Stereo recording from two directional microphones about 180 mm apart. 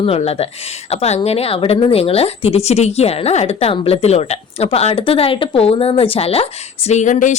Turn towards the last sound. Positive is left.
turn(degrees=45)  # may be behind; listen again after turning